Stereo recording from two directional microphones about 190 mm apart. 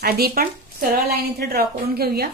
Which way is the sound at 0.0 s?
55° right (ahead or behind).